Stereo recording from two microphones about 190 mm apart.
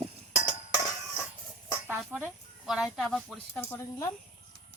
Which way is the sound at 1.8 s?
10° right (ahead or behind).